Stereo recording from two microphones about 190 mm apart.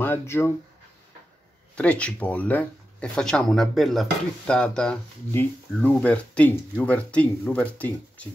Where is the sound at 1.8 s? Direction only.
5° left (ahead or behind).